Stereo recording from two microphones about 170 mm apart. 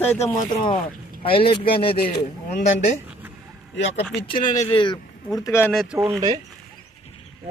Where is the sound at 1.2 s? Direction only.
30° left (ahead or behind).